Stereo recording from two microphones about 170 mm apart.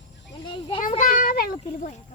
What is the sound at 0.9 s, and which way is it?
Child singing, 50° left (ahead or behind).